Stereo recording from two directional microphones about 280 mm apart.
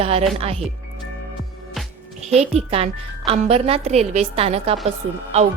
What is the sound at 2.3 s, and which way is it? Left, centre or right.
A woman's voice, right.